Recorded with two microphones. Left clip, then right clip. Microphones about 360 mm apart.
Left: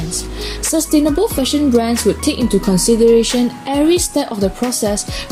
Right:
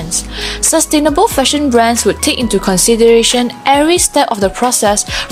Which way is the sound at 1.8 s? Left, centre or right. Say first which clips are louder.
Right 4 dB; centre.